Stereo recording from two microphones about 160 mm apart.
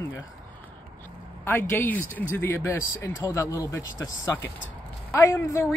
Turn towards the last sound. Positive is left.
turn(degrees=15)  # may be behind; listen again after turning